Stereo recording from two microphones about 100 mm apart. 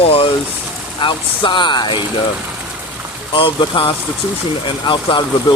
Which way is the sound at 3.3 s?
60° left (ahead or behind).